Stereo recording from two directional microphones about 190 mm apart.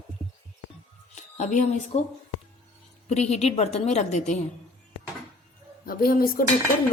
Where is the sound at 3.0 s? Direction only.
35° left (ahead or behind).